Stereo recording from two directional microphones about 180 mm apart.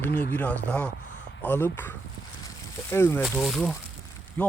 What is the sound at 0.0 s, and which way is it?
Speech, 10° left (ahead or behind).